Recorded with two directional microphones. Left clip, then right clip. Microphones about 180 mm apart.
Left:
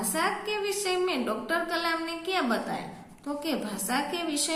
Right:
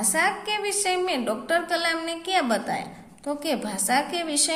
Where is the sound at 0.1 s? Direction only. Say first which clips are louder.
Right 5 dB; 35° right (ahead or behind).